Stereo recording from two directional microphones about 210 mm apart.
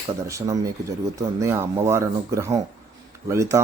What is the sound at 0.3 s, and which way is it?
Speech, 15° right (ahead or behind).